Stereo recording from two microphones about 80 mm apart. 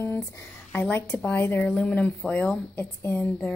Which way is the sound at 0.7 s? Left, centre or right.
Left.